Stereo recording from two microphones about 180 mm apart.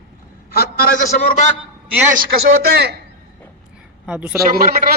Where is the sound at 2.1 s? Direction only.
60° right (ahead or behind).